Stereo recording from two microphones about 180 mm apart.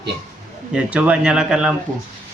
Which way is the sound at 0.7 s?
5° right (ahead or behind).